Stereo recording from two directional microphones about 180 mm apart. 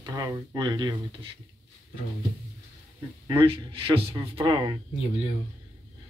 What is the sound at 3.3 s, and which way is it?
Speech, 30° right (ahead or behind).